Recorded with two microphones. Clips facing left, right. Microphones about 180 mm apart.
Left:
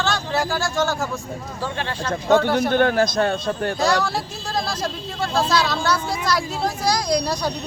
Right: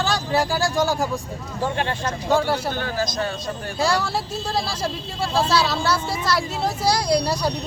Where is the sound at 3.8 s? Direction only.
5° right (ahead or behind).